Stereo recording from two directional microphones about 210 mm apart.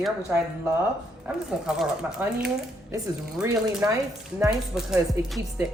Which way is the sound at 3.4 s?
15° right (ahead or behind).